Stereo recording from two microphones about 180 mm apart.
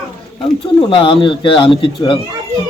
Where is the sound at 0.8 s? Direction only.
30° left (ahead or behind).